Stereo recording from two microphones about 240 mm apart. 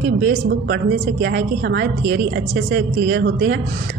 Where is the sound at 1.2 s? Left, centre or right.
Right.